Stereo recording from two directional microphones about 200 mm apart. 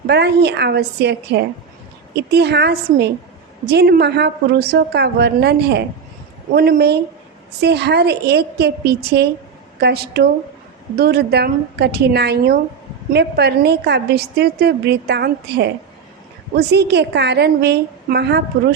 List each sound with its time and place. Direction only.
0.1 s a woman's voice: 55° right (ahead or behind)